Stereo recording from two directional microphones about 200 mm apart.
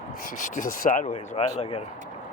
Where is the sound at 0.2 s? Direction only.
40° left (ahead or behind).